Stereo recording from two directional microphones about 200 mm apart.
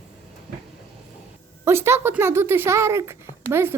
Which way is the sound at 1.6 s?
10° right (ahead or behind).